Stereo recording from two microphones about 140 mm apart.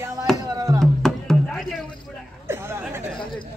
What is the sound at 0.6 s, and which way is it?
Music, 25° right (ahead or behind).